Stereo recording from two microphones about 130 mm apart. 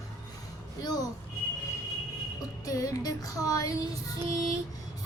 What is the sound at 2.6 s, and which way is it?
A child's voice, 25° left (ahead or behind).